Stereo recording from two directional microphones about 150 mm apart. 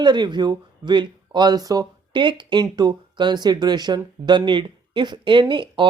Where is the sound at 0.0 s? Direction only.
30° right (ahead or behind).